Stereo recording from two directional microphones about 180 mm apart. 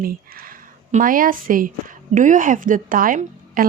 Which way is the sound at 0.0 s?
55° right (ahead or behind).